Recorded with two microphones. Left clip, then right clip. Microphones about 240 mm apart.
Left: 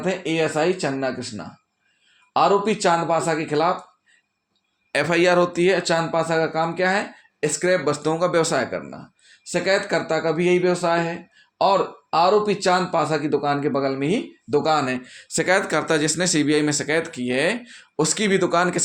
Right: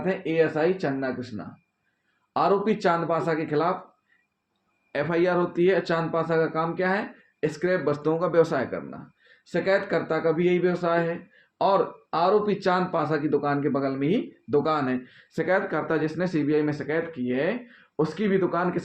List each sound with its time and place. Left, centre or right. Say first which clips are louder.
0.0 s speech: left 1 dB; left
4.9 s speech: left 6 dB; left